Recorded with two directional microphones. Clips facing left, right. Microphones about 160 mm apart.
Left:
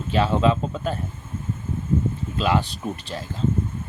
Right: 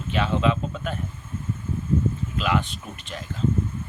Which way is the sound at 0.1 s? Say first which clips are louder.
Left 3 dB; 35° left (ahead or behind).